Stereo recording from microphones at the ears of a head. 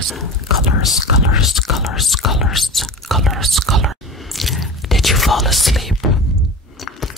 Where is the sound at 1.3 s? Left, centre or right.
Left.